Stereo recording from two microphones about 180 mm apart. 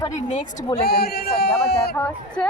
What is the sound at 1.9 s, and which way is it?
Speech, 10° left (ahead or behind).